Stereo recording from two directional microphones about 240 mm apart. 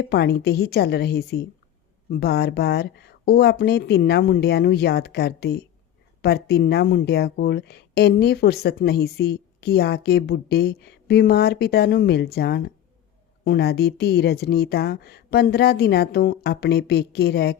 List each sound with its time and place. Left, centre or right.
0.0 s speech: left